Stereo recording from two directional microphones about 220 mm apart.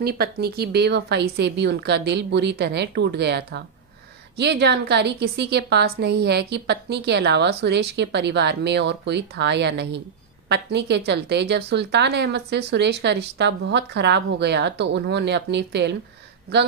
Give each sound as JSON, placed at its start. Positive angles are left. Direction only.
{"t": 0.0, "sound": "a woman's voice", "side_deg": -45}